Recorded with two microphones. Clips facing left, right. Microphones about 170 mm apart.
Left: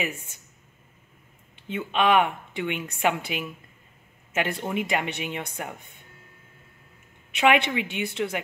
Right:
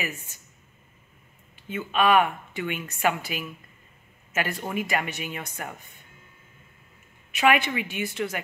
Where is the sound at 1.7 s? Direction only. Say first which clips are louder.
Even; 20° left (ahead or behind).